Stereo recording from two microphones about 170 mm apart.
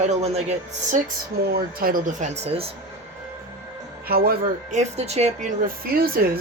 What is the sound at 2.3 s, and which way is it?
Speech, 35° right (ahead or behind).